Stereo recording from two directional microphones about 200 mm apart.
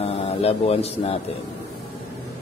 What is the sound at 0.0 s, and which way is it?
Speech, 30° left (ahead or behind).